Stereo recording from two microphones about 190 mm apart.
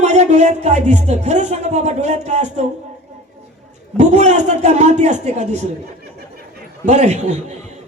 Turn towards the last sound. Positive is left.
turn(degrees=-40)  # may be behind; listen again after turning